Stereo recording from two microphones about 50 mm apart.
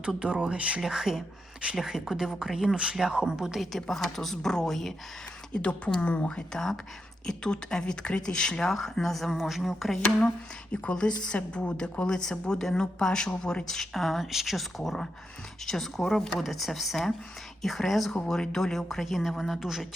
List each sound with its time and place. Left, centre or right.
0.2 s speech: centre
0.8 s speech: centre
2.7 s speech: right
3.7 s a woman's voice: centre
5.5 s a woman's voice: left; by 10.0 s centre
10.2 s a woman's voice: left; by 19.9 s centre